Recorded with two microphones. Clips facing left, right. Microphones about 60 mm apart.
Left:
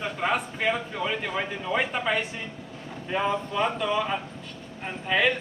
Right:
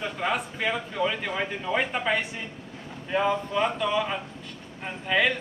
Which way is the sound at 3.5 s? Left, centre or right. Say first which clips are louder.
Even; centre.